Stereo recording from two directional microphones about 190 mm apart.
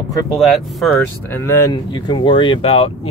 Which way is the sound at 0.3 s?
Centre (ahead or behind).